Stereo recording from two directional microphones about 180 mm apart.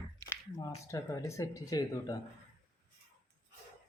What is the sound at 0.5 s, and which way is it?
Speech, 20° left (ahead or behind).